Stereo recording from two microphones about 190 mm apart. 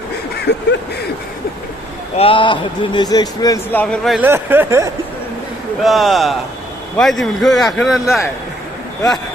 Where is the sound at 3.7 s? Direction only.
5° left (ahead or behind).